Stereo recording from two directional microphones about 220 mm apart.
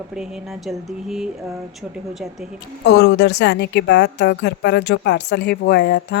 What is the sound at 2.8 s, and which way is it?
A woman's voice, 50° left (ahead or behind).